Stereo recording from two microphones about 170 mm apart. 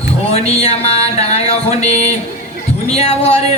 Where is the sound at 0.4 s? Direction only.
35° left (ahead or behind).